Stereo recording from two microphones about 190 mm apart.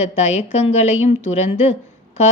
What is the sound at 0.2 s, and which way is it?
A woman's voice, 35° left (ahead or behind).